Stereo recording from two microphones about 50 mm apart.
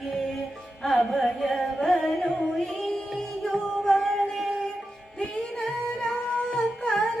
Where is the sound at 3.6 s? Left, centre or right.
Centre.